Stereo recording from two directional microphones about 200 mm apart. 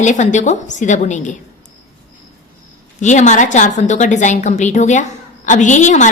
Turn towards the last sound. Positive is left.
turn(degrees=40)  # may be behind; listen again after turning